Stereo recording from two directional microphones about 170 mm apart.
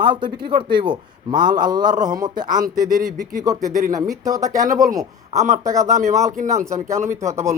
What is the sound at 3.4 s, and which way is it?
Speech, 20° right (ahead or behind).